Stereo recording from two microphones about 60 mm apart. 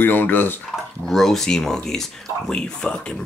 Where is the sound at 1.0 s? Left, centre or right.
Centre.